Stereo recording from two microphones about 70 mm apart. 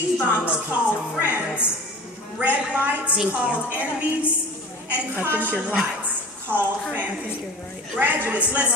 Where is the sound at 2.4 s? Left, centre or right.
Right.